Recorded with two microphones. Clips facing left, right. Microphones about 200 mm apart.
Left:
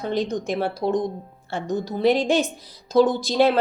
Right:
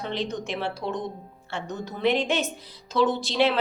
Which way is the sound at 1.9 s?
35° left (ahead or behind).